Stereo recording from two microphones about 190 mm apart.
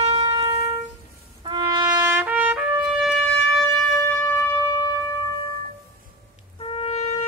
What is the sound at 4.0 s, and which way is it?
Music, 15° left (ahead or behind).